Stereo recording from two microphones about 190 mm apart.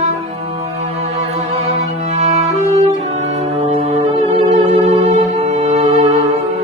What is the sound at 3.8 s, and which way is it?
Music, 35° right (ahead or behind).